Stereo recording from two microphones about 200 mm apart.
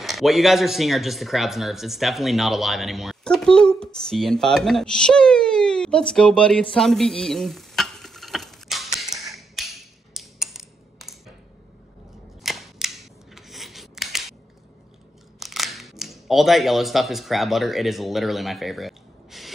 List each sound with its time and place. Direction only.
0.0 s speech: centre (ahead or behind)
12.4 s scissors: centre (ahead or behind)
15.3 s speech: centre (ahead or behind)